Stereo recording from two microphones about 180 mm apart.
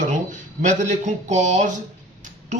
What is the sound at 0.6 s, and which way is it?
A man's voice, 40° right (ahead or behind).